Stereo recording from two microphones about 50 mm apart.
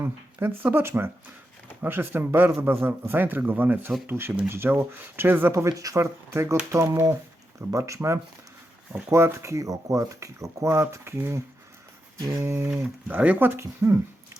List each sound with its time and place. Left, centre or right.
0.0 s speech: right
5.5 s speech: right
6.7 s speech: right
9.0 s speech: right
13.1 s speech: right
13.4 s speech: right